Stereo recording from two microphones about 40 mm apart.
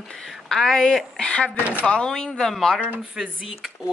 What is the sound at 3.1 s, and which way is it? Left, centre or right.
Speech, centre.